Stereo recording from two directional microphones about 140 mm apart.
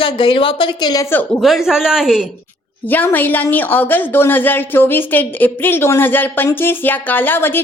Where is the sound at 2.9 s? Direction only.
15° left (ahead or behind).